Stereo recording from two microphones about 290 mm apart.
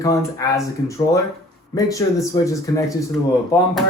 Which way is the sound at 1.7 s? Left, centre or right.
Centre.